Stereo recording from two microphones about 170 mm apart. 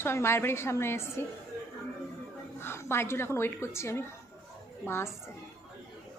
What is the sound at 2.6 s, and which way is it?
A woman's voice, 15° left (ahead or behind).